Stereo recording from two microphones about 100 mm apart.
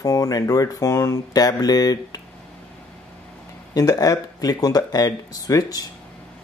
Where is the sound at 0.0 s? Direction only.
35° left (ahead or behind).